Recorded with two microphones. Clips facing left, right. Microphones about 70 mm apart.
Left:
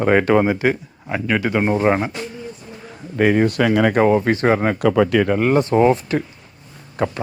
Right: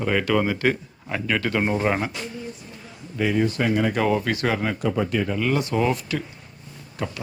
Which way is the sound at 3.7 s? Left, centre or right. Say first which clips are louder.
Left 6 dB; left.